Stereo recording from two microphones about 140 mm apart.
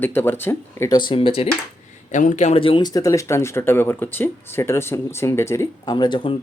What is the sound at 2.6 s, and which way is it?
Speech, 35° left (ahead or behind).